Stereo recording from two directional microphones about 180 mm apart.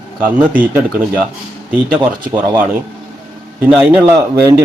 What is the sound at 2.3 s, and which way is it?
Speech, 25° right (ahead or behind).